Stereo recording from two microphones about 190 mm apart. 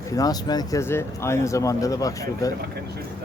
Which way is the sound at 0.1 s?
20° left (ahead or behind).